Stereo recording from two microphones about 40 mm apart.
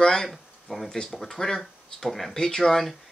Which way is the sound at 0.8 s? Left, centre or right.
Left.